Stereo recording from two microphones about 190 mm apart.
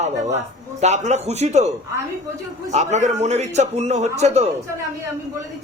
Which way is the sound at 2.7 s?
35° right (ahead or behind).